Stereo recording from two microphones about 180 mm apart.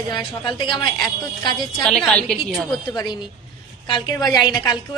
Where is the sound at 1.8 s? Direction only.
5° left (ahead or behind).